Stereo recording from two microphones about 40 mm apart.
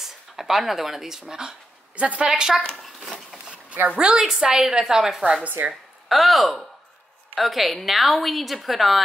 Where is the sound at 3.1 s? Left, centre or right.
Right.